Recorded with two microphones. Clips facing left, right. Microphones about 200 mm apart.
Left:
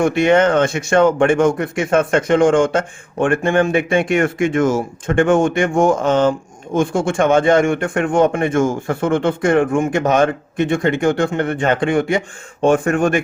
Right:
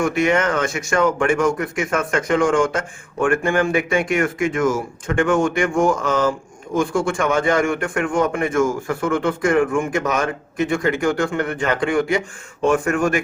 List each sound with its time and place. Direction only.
0.0 s speech: 30° left (ahead or behind)